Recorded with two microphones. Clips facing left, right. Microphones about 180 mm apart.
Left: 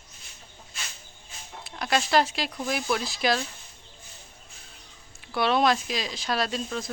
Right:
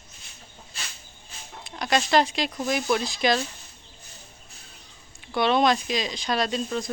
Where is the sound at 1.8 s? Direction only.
5° left (ahead or behind).